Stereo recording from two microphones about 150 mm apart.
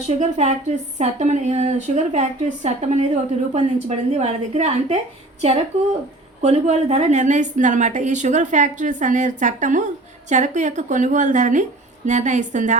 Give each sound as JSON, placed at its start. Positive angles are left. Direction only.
{"t": 0.1, "sound": "a woman's voice", "side_deg": -50}